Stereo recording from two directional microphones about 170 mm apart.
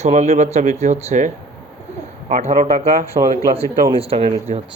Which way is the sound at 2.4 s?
45° right (ahead or behind).